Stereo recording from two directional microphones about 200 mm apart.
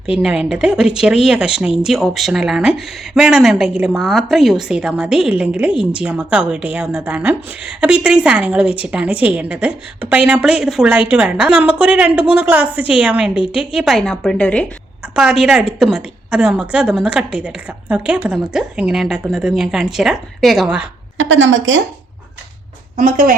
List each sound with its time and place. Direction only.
0.2 s a woman's voice: 5° right (ahead or behind)
21.2 s a woman's voice: 70° right (ahead or behind)
23.0 s speech: 40° right (ahead or behind)